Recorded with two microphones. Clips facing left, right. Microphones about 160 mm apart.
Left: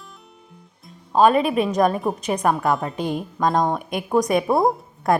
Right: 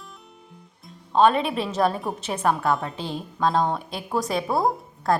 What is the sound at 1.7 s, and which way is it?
A woman's voice, 10° left (ahead or behind).